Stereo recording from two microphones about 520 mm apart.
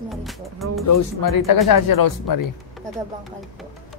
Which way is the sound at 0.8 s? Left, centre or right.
Left.